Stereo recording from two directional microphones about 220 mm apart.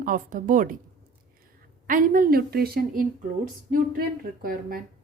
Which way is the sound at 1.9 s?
40° right (ahead or behind).